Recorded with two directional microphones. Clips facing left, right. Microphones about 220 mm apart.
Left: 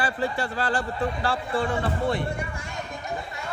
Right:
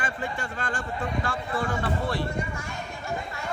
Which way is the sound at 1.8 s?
25° left (ahead or behind).